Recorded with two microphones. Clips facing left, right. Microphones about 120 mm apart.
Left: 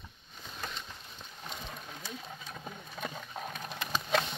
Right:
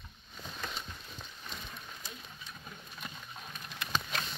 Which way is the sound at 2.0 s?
70° left (ahead or behind).